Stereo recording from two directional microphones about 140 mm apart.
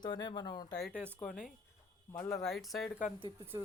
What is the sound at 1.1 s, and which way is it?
Speech, 5° left (ahead or behind).